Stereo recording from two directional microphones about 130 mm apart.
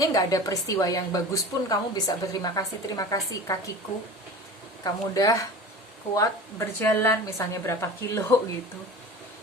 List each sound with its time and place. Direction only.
0.0 s speech: 25° left (ahead or behind)
4.8 s speech: 25° left (ahead or behind)